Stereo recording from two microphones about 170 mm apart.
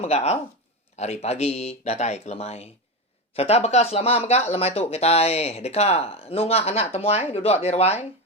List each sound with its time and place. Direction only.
0.0 s speech: 40° left (ahead or behind)